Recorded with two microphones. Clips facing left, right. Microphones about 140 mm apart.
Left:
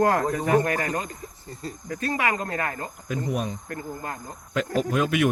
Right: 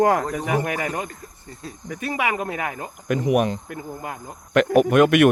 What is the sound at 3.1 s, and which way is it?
Speech, 85° right.